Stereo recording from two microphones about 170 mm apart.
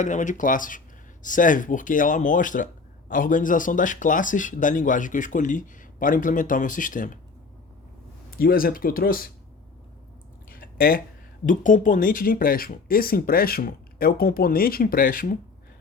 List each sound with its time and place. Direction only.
0.0 s speech: 45° left (ahead or behind)
8.3 s speech: 60° left (ahead or behind)
10.5 s a sound: 60° left (ahead or behind)
11.4 s speech: 50° left (ahead or behind)